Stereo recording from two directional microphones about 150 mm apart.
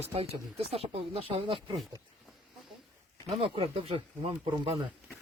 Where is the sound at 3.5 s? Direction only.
40° right (ahead or behind).